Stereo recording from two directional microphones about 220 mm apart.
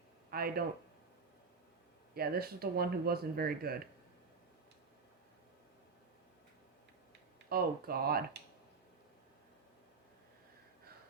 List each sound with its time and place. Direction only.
0.3 s a sound: 45° right (ahead or behind)
2.1 s speech: 45° right (ahead or behind)
7.5 s speech: 45° right (ahead or behind)